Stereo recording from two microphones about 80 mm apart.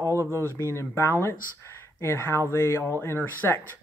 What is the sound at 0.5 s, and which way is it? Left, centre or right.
Speech, left.